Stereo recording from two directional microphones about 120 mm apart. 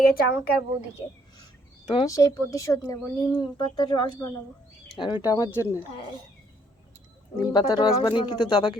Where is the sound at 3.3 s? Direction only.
40° left (ahead or behind).